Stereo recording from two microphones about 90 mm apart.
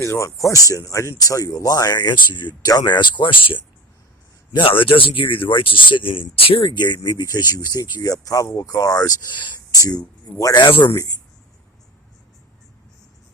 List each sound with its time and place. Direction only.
0.0 s speech: 35° left (ahead or behind); by 6.7 s 90° left
6.7 s speech: 55° left (ahead or behind)
9.3 s speech: 60° left (ahead or behind)
9.7 s speech: 40° left (ahead or behind)
10.5 s speech: 65° left (ahead or behind)
10.8 s speech: 40° left (ahead or behind)